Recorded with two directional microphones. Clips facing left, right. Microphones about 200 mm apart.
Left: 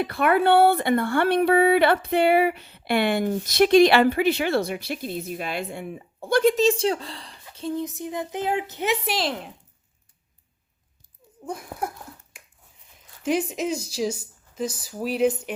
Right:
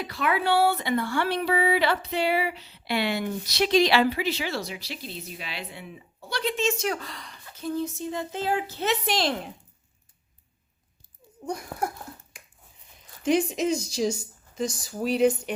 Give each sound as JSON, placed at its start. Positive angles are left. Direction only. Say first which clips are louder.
{"t": 0.0, "sound": "speech", "louder": "left 6 dB", "side_deg": 55}
{"t": 11.4, "sound": "a sound", "louder": "right 1 dB", "side_deg": 0}
{"t": 13.2, "sound": "speech", "louder": "right 1 dB", "side_deg": 5}